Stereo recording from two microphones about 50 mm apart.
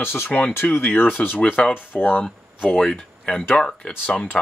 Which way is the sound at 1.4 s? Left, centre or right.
Left.